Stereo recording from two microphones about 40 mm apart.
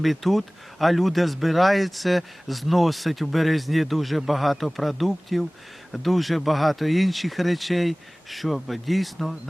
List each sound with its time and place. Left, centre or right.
0.0 s speech: centre